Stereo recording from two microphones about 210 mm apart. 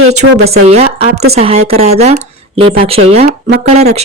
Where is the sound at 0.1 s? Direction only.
30° right (ahead or behind).